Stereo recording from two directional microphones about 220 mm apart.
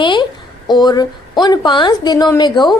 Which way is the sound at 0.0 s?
20° left (ahead or behind).